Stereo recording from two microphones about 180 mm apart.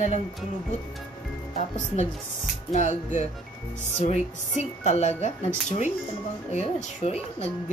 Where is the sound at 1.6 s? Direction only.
40° left (ahead or behind).